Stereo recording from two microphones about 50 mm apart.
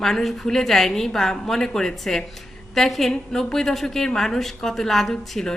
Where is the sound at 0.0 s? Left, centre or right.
Centre.